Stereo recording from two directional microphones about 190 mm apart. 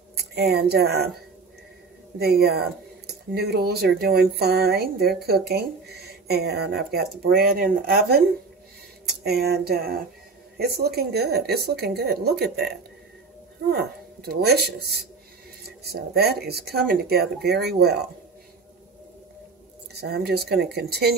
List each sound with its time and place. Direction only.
0.1 s a woman's voice: 60° right (ahead or behind)
2.1 s speech: 55° right (ahead or behind)
9.2 s speech: 55° right (ahead or behind)
13.7 s speech: 55° right (ahead or behind)
15.9 s speech: 55° right (ahead or behind)
20.0 s speech: 55° right (ahead or behind)